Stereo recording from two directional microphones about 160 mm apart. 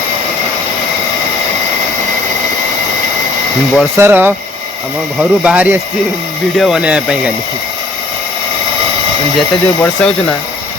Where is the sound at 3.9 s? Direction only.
15° right (ahead or behind).